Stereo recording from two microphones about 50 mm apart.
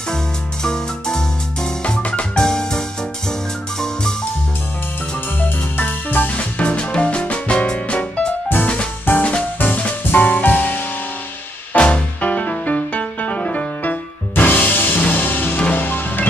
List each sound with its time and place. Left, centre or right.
0.7 s music: centre
2.0 s music: left
2.4 s music: centre
5.4 s music: left
6.3 s music: left
9.1 s music: left
9.8 s music: left
11.7 s music: left